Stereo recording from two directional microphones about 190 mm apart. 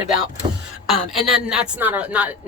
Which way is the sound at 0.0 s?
5° right (ahead or behind).